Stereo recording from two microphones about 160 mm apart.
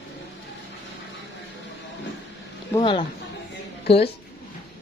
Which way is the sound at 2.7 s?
30° left (ahead or behind).